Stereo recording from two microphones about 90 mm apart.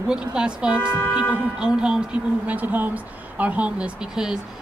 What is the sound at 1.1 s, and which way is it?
A woman's voice, 10° right (ahead or behind).